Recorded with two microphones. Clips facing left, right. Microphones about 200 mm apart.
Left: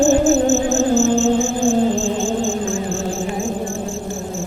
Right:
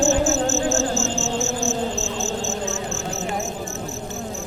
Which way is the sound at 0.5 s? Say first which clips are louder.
Left 6 dB; 60° left (ahead or behind).